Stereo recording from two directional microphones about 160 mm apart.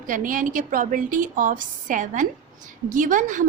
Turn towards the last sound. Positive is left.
turn(degrees=-55)  # may be behind; listen again after turning